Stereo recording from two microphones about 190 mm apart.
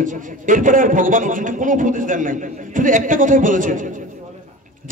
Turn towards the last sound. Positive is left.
turn(degrees=-45)  # may be behind; listen again after turning